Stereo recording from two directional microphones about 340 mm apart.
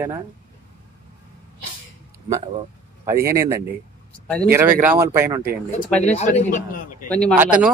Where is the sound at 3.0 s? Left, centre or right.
Centre.